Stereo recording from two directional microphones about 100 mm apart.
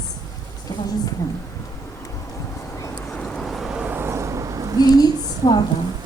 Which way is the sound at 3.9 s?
25° right (ahead or behind).